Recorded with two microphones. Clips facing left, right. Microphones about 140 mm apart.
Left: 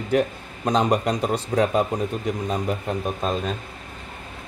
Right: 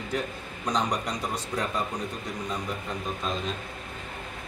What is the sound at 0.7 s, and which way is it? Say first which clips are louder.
Speech: left 8 dB; 55° left (ahead or behind).